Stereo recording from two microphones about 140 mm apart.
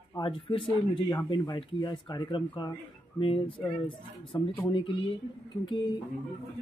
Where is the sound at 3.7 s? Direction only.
40° left (ahead or behind).